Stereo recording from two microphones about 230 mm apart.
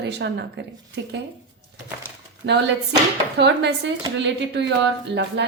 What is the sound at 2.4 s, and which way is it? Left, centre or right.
Speech, right.